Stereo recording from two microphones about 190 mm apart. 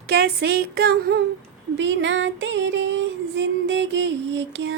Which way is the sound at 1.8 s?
70° right (ahead or behind).